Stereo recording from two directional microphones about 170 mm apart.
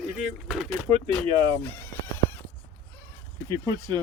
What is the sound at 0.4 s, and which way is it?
Speech, 5° right (ahead or behind).